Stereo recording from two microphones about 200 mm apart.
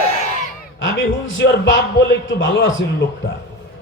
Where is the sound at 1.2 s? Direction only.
70° left (ahead or behind).